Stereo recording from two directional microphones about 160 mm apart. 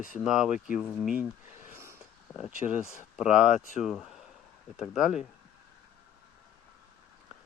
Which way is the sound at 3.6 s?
55° left (ahead or behind).